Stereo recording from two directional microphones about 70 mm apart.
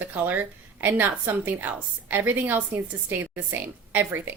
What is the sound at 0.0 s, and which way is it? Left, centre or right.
A woman's voice, right.